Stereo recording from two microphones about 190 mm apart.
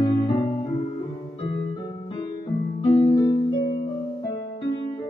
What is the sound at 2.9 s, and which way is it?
Music, 25° left (ahead or behind).